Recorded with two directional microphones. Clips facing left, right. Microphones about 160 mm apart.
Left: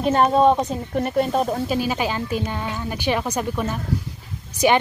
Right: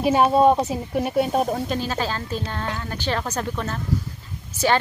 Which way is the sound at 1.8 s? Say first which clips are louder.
Left 3 dB; 15° left (ahead or behind).